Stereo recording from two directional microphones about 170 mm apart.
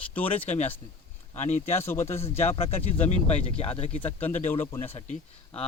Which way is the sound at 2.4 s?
35° left (ahead or behind).